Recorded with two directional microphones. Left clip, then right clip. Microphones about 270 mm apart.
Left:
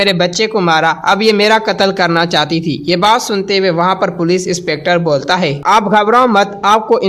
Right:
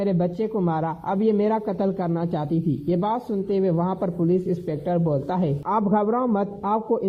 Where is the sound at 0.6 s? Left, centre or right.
Centre.